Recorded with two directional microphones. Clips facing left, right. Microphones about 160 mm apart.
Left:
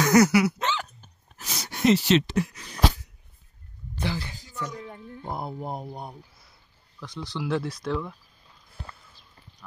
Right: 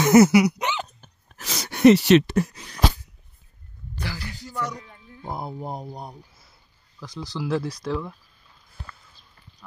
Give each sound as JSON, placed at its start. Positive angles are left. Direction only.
{"t": 0.0, "sound": "throat clearing", "side_deg": -25}
{"t": 1.0, "sound": "a sound", "side_deg": -90}
{"t": 4.0, "sound": "speech", "side_deg": 20}
{"t": 4.4, "sound": "speech", "side_deg": -70}
{"t": 5.3, "sound": "speech", "side_deg": 0}